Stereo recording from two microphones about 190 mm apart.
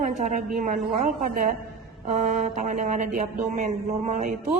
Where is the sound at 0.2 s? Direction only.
45° right (ahead or behind).